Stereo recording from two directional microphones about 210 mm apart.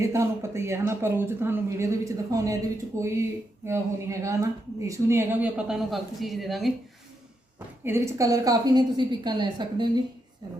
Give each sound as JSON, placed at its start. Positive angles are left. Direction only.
{"t": 0.0, "sound": "speech", "side_deg": -15}
{"t": 7.9, "sound": "a woman's voice", "side_deg": -15}